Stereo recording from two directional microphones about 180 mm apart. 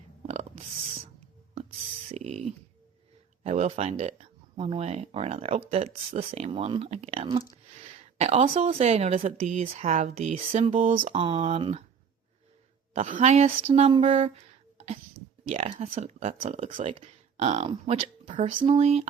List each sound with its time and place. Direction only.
0.3 s burping: 40° right (ahead or behind)
2.0 s a sound: 35° right (ahead or behind)
3.4 s speech: 40° right (ahead or behind)
10.8 s speech: 45° right (ahead or behind)
11.1 s speech: 30° right (ahead or behind)
12.9 s speech: 45° right (ahead or behind)